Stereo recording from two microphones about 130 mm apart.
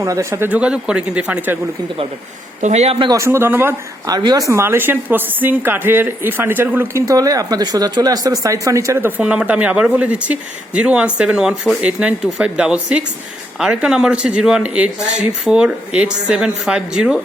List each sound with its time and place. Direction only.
0.0 s a woman's voice: 25° right (ahead or behind)
2.6 s speech: 60° right (ahead or behind)
3.1 s speech: 20° right (ahead or behind)
4.0 s a woman's voice: 30° right (ahead or behind); by 17.2 s 5° right (ahead or behind)